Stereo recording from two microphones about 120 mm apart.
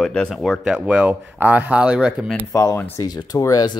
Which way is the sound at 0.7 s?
10° right (ahead or behind).